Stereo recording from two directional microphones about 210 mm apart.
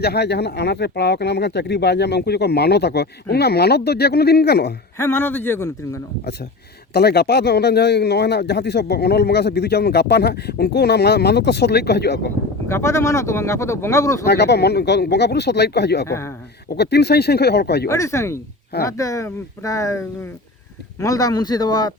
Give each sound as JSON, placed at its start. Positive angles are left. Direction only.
{"t": 0.0, "sound": "speech", "side_deg": 50}
{"t": 4.9, "sound": "speech", "side_deg": 10}
{"t": 6.9, "sound": "speech", "side_deg": 50}
{"t": 12.6, "sound": "speech", "side_deg": 15}
{"t": 14.3, "sound": "speech", "side_deg": 50}
{"t": 16.0, "sound": "speech", "side_deg": 15}
{"t": 16.6, "sound": "speech", "side_deg": 50}
{"t": 17.8, "sound": "speech", "side_deg": 15}